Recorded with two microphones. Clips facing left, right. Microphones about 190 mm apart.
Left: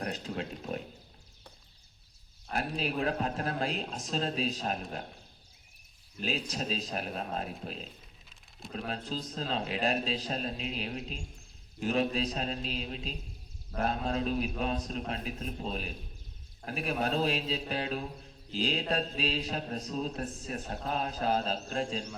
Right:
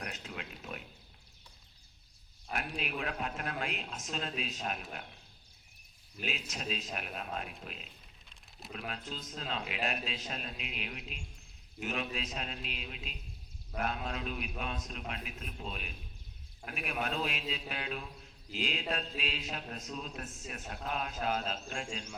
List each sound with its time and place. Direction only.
0.0 s pig: 35° left (ahead or behind)
2.5 s speech: 35° left (ahead or behind)
6.2 s speech: 35° left (ahead or behind)
8.9 s speech: 35° left (ahead or behind)